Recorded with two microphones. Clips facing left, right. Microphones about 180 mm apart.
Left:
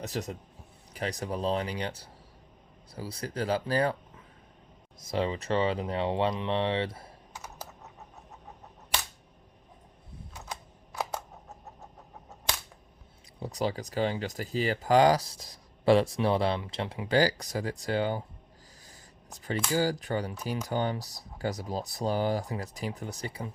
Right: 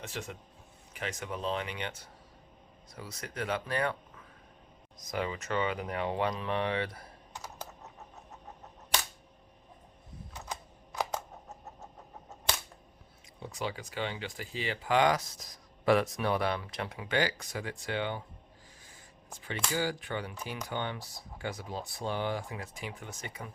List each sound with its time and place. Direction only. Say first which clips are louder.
0.0 s speech: left 6 dB; 40° left (ahead or behind)
4.9 s speech: left 5 dB; 30° left (ahead or behind)
13.4 s speech: left 6 dB; 40° left (ahead or behind)
19.4 s speech: left 5 dB; 40° left (ahead or behind)